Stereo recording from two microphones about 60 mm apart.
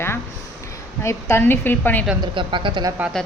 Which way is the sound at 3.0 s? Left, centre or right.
Right.